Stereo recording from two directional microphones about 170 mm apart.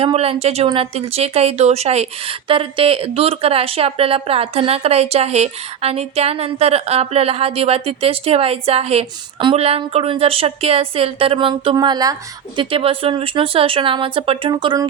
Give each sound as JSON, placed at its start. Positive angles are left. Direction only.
{"t": 0.0, "sound": "speech", "side_deg": -35}